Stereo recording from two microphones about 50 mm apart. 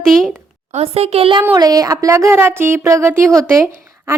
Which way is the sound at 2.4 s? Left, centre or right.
Right.